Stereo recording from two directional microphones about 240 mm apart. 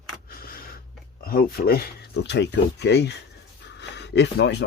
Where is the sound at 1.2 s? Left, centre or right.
Left.